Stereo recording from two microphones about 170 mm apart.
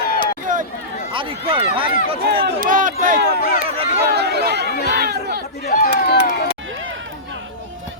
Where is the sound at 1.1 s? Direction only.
30° right (ahead or behind).